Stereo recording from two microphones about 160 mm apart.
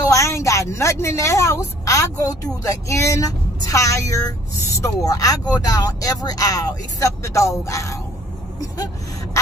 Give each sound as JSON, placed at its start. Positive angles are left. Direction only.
{"t": 0.1, "sound": "a woman's voice", "side_deg": 20}